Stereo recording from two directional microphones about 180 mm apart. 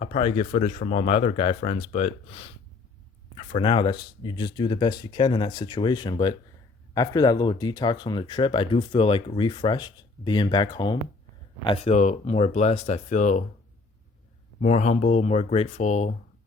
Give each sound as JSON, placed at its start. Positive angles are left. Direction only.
{"t": 0.0, "sound": "speech", "side_deg": 40}
{"t": 14.6, "sound": "speech", "side_deg": 40}